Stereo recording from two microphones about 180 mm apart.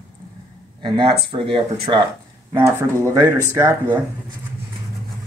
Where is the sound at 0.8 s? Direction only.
30° right (ahead or behind).